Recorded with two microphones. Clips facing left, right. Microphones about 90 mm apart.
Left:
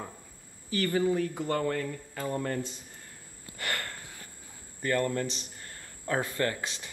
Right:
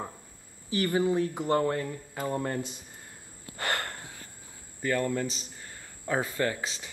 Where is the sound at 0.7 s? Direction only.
20° right (ahead or behind).